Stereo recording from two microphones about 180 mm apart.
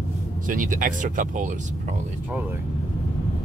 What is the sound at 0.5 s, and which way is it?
Speech, 50° right (ahead or behind).